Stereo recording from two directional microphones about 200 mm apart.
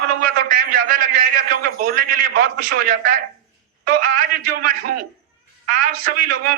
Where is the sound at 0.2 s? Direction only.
45° right (ahead or behind).